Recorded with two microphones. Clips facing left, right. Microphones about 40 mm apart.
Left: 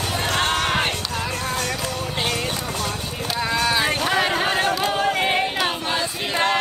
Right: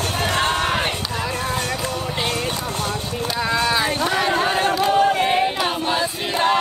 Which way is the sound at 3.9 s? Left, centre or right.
Centre.